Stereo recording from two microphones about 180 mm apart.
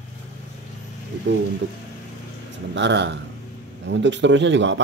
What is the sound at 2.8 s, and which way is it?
A man's voice, 80° right.